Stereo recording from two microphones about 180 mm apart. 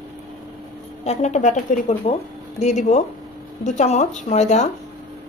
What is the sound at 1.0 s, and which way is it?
Speech, 40° left (ahead or behind).